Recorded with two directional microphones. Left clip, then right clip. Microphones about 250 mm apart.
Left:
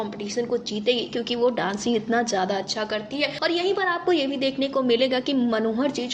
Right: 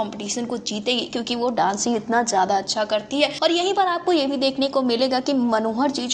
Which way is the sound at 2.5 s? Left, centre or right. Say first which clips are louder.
Right 5 dB; right.